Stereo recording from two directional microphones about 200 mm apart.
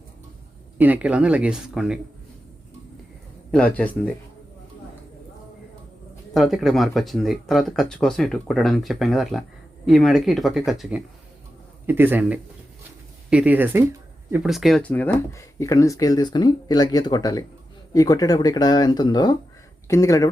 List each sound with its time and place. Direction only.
0.8 s speech: 10° right (ahead or behind)
3.5 s speech: 5° left (ahead or behind)
6.3 s a man's voice: centre (ahead or behind); by 20.3 s 15° left (ahead or behind)